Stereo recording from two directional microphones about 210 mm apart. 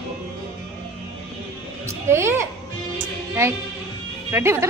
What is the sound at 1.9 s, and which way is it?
Speech, 10° right (ahead or behind).